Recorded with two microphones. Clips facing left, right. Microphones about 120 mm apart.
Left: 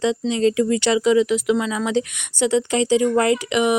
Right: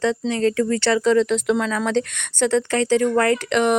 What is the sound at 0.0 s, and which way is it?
Speech, 15° left (ahead or behind).